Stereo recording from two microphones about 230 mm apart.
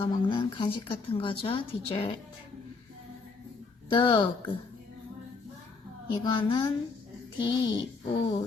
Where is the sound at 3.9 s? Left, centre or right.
Left.